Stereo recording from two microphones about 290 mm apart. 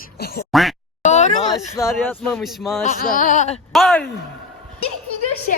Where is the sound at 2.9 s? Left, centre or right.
Left.